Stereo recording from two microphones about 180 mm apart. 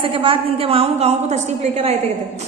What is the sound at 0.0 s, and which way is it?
A woman's voice, 30° right (ahead or behind).